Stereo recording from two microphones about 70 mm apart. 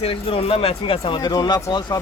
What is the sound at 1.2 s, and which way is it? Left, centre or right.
Speech, left.